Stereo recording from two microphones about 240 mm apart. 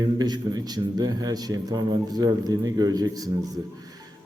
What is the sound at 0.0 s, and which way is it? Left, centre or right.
Speech, centre.